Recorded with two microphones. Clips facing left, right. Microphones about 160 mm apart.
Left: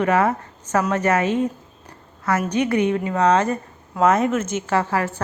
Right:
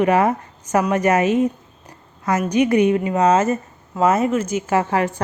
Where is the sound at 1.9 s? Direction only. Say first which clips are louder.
Right 1 dB; 15° right (ahead or behind).